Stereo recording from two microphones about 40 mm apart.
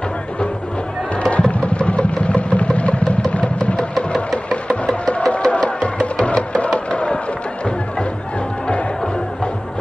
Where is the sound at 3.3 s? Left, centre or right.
Left.